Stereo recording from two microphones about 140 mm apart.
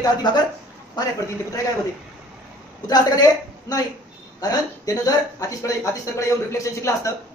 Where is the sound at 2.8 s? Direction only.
25° left (ahead or behind).